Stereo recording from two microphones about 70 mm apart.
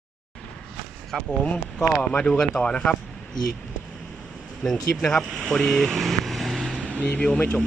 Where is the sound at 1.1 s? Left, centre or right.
Centre.